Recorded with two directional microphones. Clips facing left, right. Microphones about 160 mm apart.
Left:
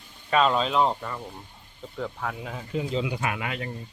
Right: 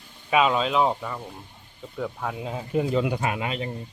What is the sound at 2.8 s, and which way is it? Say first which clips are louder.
Speech: right 5 dB; 55° right (ahead or behind).